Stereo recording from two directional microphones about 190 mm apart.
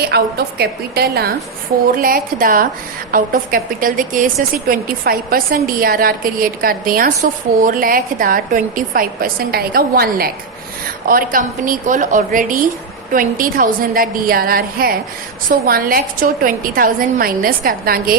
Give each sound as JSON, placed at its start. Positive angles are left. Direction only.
{"t": 0.0, "sound": "a woman's voice", "side_deg": -55}